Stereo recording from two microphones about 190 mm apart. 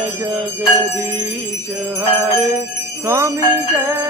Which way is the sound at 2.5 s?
15° right (ahead or behind).